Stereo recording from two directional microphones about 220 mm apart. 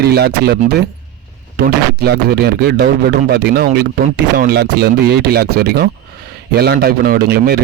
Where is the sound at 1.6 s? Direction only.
45° right (ahead or behind).